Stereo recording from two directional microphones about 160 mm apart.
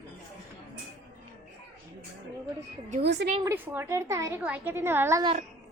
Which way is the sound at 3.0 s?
90° right.